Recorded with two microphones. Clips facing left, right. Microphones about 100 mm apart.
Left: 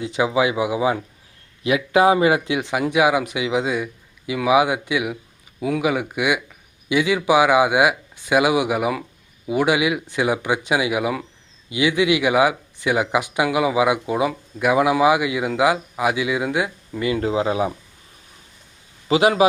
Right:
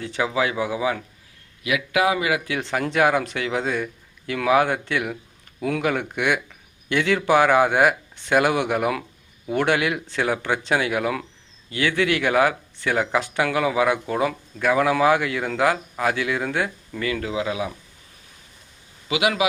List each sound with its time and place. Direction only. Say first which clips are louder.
0.0 s a man's voice: left 4 dB; 15° left (ahead or behind)
2.5 s speech: left 3 dB; 15° left (ahead or behind)
17.1 s speech: left 5 dB; 30° left (ahead or behind)
19.0 s a man's voice: left 6 dB; 35° left (ahead or behind)